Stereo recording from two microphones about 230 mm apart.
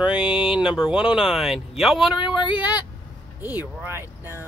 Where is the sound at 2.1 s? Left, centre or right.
Left.